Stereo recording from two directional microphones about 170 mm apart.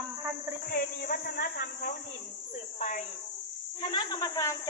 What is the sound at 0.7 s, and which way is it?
Speech, 55° left (ahead or behind).